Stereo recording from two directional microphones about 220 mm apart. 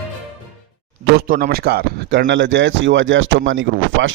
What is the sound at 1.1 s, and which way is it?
A man's voice, 40° right (ahead or behind).